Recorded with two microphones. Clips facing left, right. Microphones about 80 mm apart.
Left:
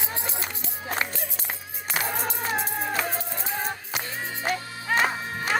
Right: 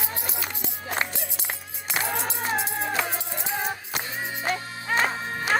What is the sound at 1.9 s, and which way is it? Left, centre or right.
Music, left.